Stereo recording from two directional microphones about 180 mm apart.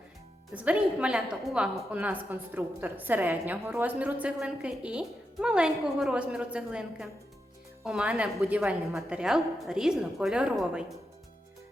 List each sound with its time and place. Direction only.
0.5 s a woman's voice: 5° right (ahead or behind)